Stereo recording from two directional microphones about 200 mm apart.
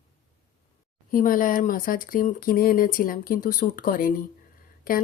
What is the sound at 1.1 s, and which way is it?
A woman's voice, 45° left (ahead or behind).